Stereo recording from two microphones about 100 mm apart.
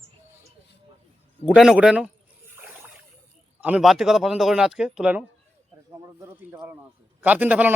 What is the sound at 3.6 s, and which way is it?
Speech, 15° right (ahead or behind).